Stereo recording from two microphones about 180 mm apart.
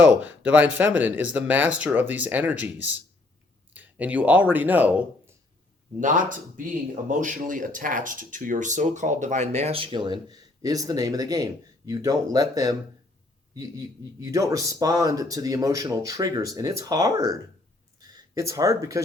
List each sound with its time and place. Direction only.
0.0 s speech: 10° right (ahead or behind)
6.0 s a man's voice: 45° right (ahead or behind); by 19.0 s 20° right (ahead or behind)